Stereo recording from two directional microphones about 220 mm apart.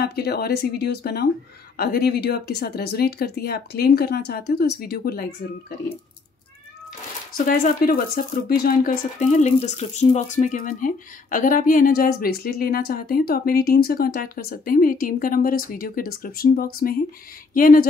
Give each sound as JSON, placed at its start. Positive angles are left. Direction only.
{"t": 0.0, "sound": "speech", "side_deg": 45}
{"t": 7.3, "sound": "speech", "side_deg": 40}